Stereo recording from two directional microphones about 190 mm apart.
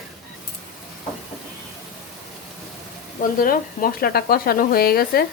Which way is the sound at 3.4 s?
50° left (ahead or behind).